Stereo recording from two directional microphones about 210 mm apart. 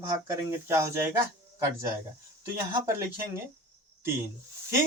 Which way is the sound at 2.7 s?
15° right (ahead or behind).